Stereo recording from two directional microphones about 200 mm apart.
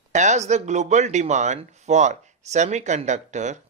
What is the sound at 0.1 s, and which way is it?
Speech, 35° right (ahead or behind).